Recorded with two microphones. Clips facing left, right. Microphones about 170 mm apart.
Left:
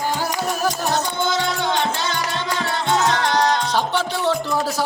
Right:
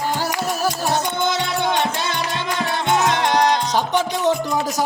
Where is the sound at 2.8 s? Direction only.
15° right (ahead or behind).